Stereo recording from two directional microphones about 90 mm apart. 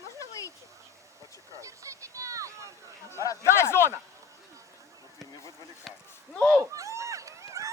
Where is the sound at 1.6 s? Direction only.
35° right (ahead or behind).